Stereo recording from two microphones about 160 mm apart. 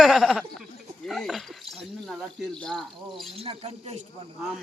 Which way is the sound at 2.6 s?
Centre (ahead or behind).